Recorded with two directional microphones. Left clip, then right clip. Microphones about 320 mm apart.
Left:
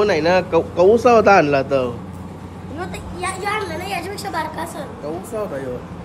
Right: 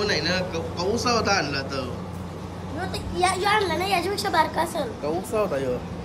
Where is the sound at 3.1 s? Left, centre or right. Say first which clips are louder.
Right 2 dB; right.